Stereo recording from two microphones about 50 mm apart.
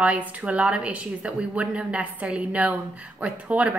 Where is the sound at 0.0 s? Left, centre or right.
Right.